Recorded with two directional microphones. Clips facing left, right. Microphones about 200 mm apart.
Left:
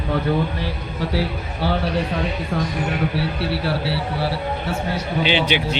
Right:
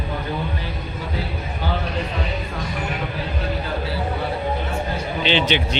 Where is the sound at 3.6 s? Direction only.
90° left.